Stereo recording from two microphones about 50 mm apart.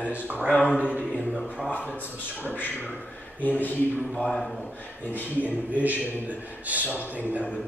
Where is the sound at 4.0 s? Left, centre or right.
Left.